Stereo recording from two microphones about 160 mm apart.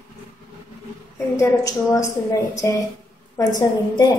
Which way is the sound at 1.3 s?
20° left (ahead or behind).